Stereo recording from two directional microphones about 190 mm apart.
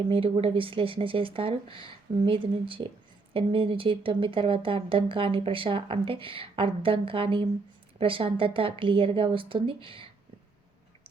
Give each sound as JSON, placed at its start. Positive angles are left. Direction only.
{"t": 0.1, "sound": "speech", "side_deg": -30}